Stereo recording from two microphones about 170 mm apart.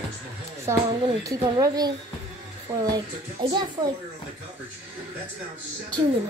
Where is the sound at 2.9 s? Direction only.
30° right (ahead or behind).